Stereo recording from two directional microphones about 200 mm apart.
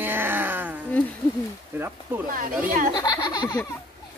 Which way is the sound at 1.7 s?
10° right (ahead or behind).